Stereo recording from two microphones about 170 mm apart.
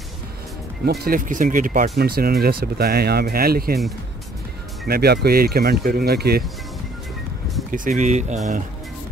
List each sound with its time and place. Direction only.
0.8 s speech: 65° right (ahead or behind)
4.8 s speech: 65° right (ahead or behind)
7.7 s speech: 50° right (ahead or behind)